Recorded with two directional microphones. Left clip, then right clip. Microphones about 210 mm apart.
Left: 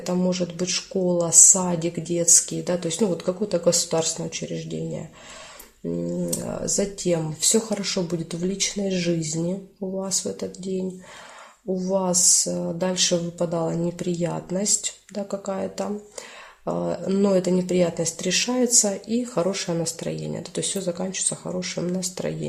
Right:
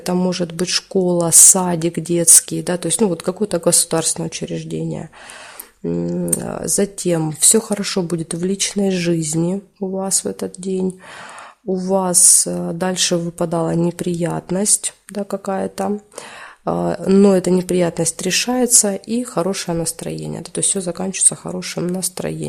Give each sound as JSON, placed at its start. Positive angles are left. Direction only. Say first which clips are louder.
{"t": 0.0, "sound": "speech", "louder": "right 5 dB", "side_deg": -50}
{"t": 6.1, "sound": "speech", "louder": "right 5 dB", "side_deg": -50}
{"t": 11.7, "sound": "speech", "louder": "right 5 dB", "side_deg": -50}